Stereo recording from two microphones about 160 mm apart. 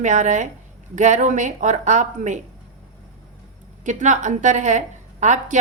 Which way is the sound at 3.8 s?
50° right (ahead or behind).